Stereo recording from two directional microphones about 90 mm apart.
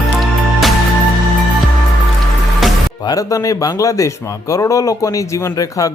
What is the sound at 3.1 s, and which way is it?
A man's voice, 40° left (ahead or behind).